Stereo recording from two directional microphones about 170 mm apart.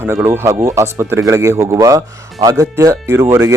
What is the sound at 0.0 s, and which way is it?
Speech, 15° right (ahead or behind).